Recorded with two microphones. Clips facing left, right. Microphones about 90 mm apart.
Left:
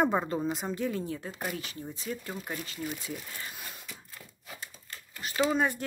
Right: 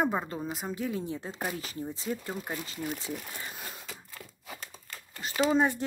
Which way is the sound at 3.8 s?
90° right.